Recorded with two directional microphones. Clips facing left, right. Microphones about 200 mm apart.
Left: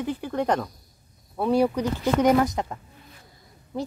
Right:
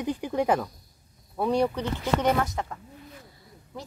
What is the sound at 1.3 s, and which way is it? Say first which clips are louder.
Speech: left 3 dB; 5° left (ahead or behind).